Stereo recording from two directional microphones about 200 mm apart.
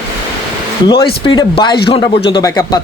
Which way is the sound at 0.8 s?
20° left (ahead or behind).